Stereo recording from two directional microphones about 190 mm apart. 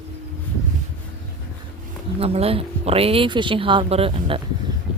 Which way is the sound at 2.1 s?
30° right (ahead or behind).